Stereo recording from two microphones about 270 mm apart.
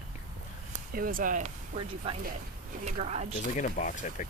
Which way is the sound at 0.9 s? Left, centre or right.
Right.